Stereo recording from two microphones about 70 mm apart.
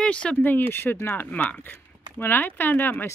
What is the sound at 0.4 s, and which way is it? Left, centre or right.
Speech, left.